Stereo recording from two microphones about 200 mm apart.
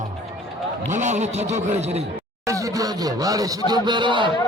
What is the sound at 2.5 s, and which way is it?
Speech, 15° right (ahead or behind).